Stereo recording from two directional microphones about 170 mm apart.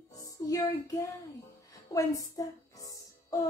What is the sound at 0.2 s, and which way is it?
Music, 20° left (ahead or behind).